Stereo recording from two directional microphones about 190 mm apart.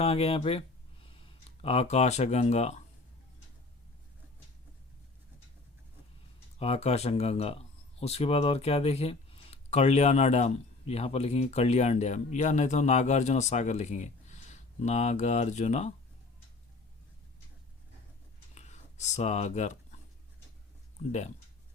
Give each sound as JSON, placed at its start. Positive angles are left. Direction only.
{"t": 0.0, "sound": "speech", "side_deg": 30}
{"t": 6.6, "sound": "speech", "side_deg": 35}
{"t": 18.5, "sound": "a sound", "side_deg": 35}
{"t": 21.0, "sound": "speech", "side_deg": 35}